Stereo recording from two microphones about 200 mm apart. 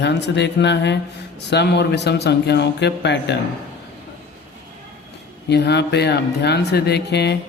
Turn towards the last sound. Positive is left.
turn(degrees=55)  # may be behind; listen again after turning